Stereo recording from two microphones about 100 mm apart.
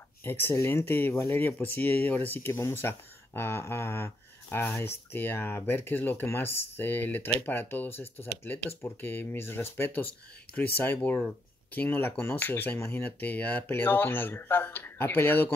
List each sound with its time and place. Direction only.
0.2 s speech: 20° left (ahead or behind)